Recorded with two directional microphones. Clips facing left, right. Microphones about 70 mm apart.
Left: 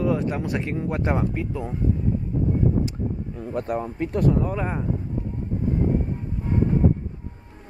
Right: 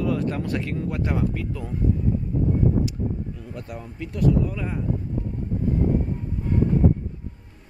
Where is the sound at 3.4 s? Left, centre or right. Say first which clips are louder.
Left 9 dB; left.